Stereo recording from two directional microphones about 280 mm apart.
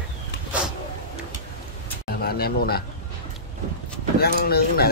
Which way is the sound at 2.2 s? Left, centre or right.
Left.